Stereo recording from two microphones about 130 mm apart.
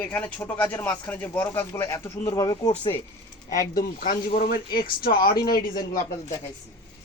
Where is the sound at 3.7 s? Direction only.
90° left.